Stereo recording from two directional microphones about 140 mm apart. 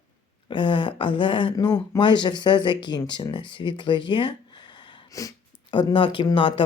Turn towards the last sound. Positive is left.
turn(degrees=40)  # may be behind; listen again after turning